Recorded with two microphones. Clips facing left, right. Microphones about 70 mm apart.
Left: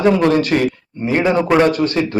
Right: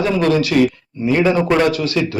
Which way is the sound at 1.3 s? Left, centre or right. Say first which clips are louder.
Left 2 dB; centre.